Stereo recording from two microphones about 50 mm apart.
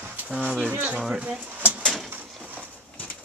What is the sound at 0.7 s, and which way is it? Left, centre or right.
Speech, right.